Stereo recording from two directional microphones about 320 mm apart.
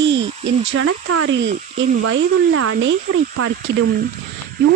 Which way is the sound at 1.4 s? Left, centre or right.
Right.